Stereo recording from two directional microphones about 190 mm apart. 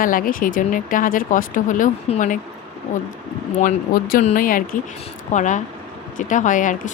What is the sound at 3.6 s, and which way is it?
Speech, 50° left (ahead or behind).